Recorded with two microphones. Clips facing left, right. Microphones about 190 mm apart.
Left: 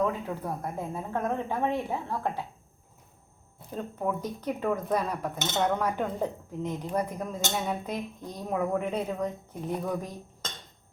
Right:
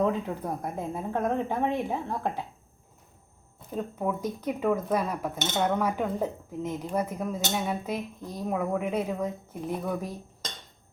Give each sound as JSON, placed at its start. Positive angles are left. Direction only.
{"t": 0.6, "sound": "a woman's voice", "side_deg": -15}
{"t": 3.7, "sound": "speech", "side_deg": -5}